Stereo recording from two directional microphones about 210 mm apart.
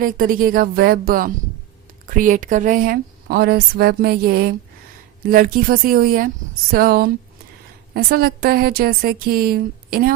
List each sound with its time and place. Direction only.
0.0 s a woman's voice: 40° right (ahead or behind)